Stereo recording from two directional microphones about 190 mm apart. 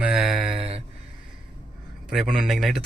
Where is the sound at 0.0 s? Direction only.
Centre (ahead or behind).